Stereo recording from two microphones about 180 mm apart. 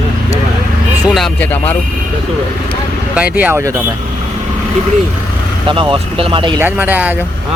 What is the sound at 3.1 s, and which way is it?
Speech, 5° right (ahead or behind).